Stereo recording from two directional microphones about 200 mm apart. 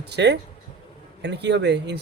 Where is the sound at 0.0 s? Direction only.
55° right (ahead or behind).